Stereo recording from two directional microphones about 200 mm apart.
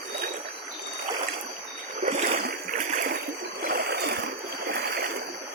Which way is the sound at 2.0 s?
35° right (ahead or behind).